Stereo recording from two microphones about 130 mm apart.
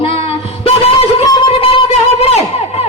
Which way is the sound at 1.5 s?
45° left (ahead or behind).